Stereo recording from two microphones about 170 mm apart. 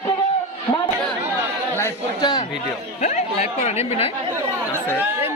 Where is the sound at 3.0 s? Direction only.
40° left (ahead or behind).